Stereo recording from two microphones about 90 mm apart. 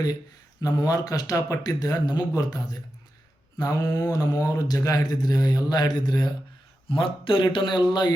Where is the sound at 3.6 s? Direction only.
45° left (ahead or behind).